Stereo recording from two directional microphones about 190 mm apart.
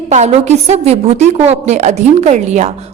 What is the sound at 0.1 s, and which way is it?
A woman's voice, 35° right (ahead or behind).